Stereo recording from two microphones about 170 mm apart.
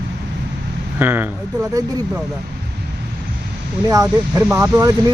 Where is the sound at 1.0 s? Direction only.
10° right (ahead or behind).